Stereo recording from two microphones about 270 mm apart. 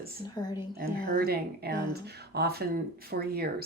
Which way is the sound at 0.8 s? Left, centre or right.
Right.